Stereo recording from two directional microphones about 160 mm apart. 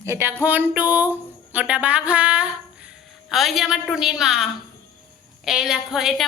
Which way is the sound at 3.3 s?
Centre (ahead or behind).